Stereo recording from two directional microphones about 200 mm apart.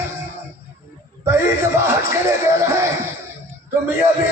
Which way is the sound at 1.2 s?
15° right (ahead or behind).